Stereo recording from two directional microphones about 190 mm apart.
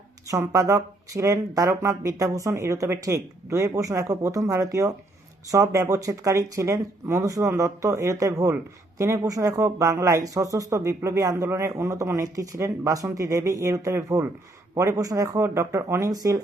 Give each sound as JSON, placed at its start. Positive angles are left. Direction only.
{"t": 0.3, "sound": "speech", "side_deg": -15}